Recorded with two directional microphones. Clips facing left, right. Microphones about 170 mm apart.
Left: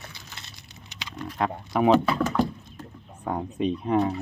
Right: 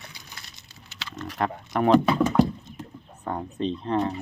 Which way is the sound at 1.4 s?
5° left (ahead or behind).